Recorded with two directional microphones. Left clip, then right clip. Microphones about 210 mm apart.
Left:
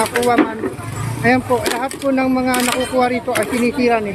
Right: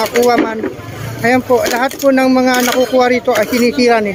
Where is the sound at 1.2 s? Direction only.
25° right (ahead or behind).